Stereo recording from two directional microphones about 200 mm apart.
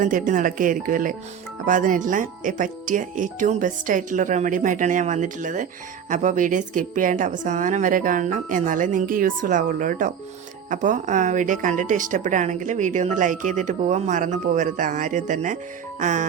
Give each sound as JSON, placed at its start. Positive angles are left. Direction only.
{"t": 0.0, "sound": "a woman's voice", "side_deg": -40}
{"t": 16.0, "sound": "music", "side_deg": -35}